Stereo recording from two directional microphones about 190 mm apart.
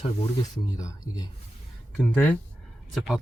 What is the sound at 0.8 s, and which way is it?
Speech, 20° left (ahead or behind).